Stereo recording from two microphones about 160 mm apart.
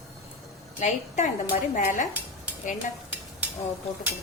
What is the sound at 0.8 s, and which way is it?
A woman's voice, 45° left (ahead or behind).